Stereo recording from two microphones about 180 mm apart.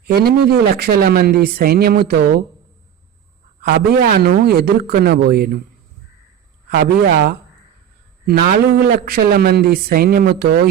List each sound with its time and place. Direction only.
0.2 s a woman's voice: 60° right (ahead or behind)
3.6 s a woman's voice: 60° right (ahead or behind)
6.7 s a woman's voice: 65° right (ahead or behind)